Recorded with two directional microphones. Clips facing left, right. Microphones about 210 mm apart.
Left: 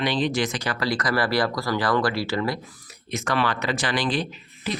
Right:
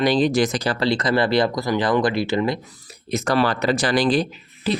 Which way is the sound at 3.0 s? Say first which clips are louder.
Right 5 dB; 35° right (ahead or behind).